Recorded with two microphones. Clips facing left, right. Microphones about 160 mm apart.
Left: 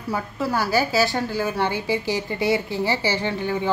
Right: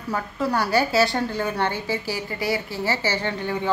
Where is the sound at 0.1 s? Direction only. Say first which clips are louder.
Even; 5° left (ahead or behind).